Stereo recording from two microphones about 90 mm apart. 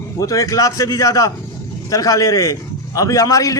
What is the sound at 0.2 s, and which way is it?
A man's voice, 40° left (ahead or behind).